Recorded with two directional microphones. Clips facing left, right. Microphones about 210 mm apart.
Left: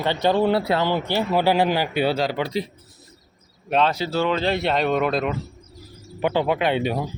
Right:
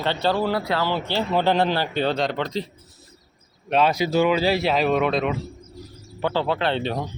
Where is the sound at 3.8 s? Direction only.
10° right (ahead or behind).